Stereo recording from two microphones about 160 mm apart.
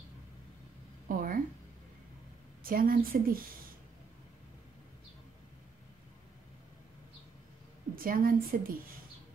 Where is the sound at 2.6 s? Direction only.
65° right (ahead or behind).